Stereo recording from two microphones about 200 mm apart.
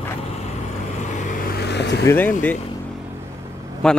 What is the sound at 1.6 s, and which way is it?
Vehicle, 60° left (ahead or behind).